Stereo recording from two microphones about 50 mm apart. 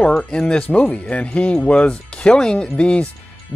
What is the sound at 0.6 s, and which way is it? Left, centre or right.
Speech, left.